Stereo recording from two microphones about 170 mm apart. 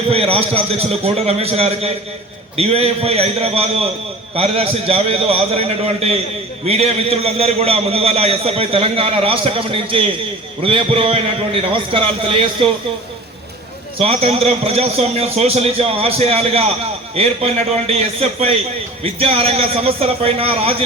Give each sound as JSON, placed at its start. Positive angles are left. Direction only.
{"t": 0.1, "sound": "a man's voice", "side_deg": -35}
{"t": 14.0, "sound": "a man's voice", "side_deg": -35}